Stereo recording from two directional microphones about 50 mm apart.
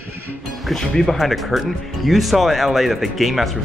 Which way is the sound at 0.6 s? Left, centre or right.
Centre.